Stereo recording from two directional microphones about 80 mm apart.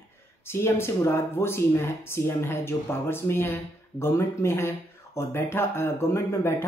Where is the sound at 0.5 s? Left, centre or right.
Left.